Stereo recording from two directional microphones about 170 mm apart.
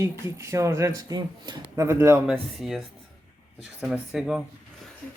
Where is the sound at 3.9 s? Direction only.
5° right (ahead or behind).